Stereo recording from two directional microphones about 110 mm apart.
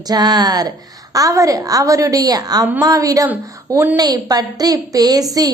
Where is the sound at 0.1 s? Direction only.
35° right (ahead or behind).